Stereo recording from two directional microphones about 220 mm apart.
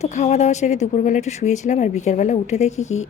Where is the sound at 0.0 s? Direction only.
30° left (ahead or behind).